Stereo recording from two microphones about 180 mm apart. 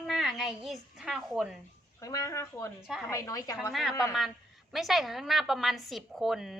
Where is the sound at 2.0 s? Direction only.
20° left (ahead or behind).